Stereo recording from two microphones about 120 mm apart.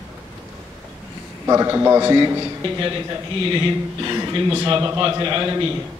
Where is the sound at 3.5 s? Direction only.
45° right (ahead or behind).